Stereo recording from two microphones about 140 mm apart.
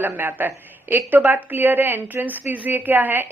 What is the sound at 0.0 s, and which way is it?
A woman's voice, 15° right (ahead or behind).